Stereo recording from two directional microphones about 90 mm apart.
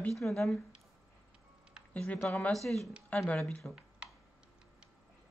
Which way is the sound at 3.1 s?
15° left (ahead or behind).